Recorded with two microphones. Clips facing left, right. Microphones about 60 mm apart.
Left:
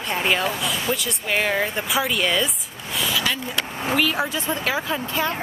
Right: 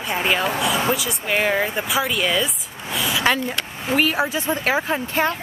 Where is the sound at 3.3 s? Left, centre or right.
Right.